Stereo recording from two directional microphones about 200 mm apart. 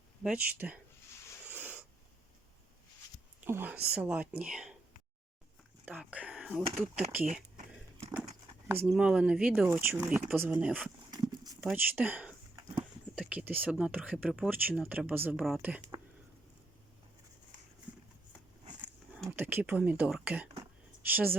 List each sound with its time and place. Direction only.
0.2 s speech: 5° right (ahead or behind)
1.5 s a sound: 10° right (ahead or behind)
3.4 s speech: 10° right (ahead or behind)
5.8 s speech: 5° right (ahead or behind)
6.6 s speech: 30° right (ahead or behind)
7.5 s a sound: 35° right (ahead or behind)
8.9 s speech: 5° right (ahead or behind)
11.1 s livestock: 20° right (ahead or behind)
11.6 s speech: 10° right (ahead or behind)
18.8 s a sound: 10° right (ahead or behind)
21.0 s speech: 10° right (ahead or behind)